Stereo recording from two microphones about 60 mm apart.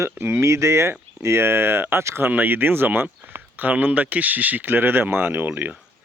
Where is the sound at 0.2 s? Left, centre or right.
Right.